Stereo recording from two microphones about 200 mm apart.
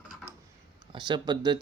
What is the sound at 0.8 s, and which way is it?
Speech, 20° right (ahead or behind).